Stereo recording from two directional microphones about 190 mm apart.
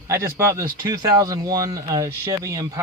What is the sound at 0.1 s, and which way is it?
Speech, 15° right (ahead or behind).